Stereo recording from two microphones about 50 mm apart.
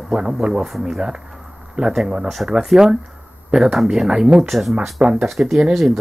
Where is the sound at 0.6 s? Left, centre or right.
Centre.